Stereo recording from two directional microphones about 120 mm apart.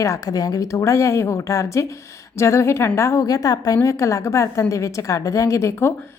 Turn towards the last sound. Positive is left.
turn(degrees=20)  # may be behind; listen again after turning